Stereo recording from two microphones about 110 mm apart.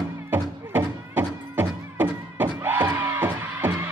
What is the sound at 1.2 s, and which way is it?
Music, 20° right (ahead or behind).